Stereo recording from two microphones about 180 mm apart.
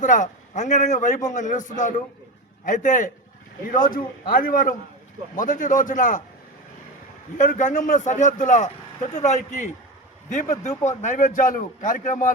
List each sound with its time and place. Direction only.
0.0 s a man's voice: 45° left (ahead or behind)
7.3 s a man's voice: 45° left (ahead or behind)